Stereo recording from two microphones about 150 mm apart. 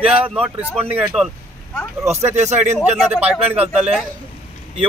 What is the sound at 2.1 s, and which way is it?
Speech, 50° right (ahead or behind).